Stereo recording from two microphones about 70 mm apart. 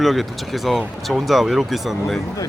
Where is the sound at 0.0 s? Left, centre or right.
Centre.